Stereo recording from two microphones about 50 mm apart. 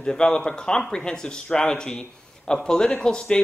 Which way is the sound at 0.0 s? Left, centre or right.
Centre.